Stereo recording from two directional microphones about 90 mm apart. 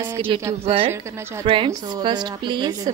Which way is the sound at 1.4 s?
75° right (ahead or behind).